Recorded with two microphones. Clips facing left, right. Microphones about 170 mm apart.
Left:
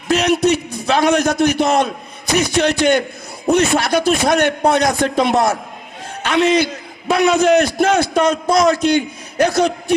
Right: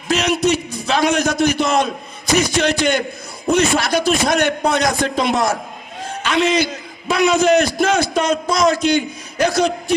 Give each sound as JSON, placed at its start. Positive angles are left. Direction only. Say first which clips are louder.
{"t": 0.1, "sound": "a man's voice", "louder": "left 2 dB", "side_deg": 60}